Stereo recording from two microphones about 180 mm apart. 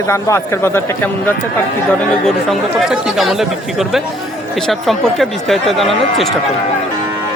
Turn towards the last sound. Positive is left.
turn(degrees=0)  # may be behind; listen again after turning